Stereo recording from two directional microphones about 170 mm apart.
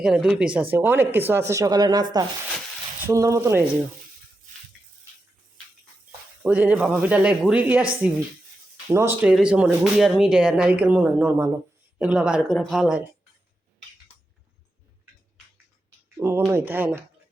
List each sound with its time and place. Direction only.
0.0 s speech: centre (ahead or behind)
6.4 s speech: 10° right (ahead or behind)
8.9 s speech: 15° right (ahead or behind)
16.1 s speech: 15° right (ahead or behind)